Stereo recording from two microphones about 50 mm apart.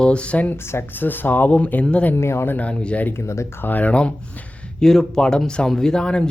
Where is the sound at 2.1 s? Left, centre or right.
Left.